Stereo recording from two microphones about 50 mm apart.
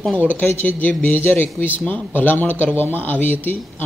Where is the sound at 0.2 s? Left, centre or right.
Left.